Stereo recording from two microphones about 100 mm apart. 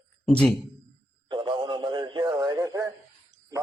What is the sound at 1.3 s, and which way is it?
Radio, 45° right (ahead or behind).